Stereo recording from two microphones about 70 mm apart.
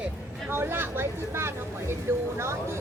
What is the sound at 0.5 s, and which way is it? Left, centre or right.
Vehicle, right.